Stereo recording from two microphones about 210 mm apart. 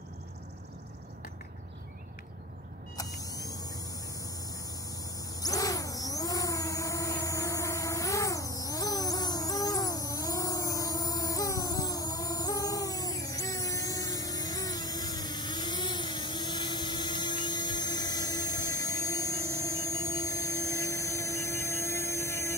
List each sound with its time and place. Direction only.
3.0 s vehicle: 15° left (ahead or behind)
5.4 s vehicle: 15° left (ahead or behind)